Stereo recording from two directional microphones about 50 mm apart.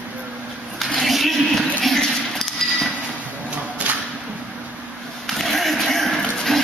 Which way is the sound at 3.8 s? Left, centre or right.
Right.